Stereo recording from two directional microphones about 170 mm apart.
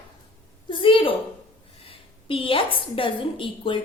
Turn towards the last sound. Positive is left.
turn(degrees=30)  # may be behind; listen again after turning